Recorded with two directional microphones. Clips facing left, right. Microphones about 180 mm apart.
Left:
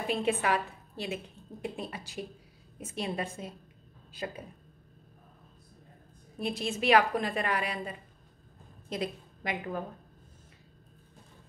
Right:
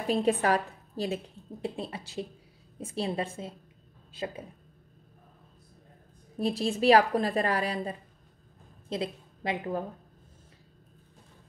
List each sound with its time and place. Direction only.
0.0 s a woman's voice: 35° right (ahead or behind)
6.3 s a woman's voice: 35° right (ahead or behind)